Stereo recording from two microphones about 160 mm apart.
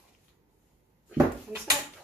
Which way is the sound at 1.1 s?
20° right (ahead or behind).